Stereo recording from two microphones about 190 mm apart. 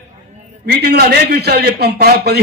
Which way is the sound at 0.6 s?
55° right (ahead or behind).